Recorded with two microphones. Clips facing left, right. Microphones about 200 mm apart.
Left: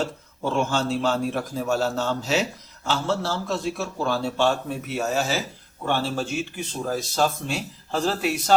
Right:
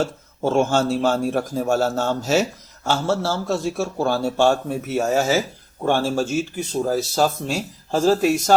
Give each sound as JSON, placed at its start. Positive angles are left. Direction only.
{"t": 0.0, "sound": "a man's voice", "side_deg": -45}